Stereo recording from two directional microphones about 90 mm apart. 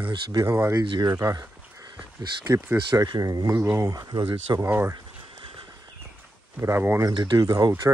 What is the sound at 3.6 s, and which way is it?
Speech, 30° right (ahead or behind).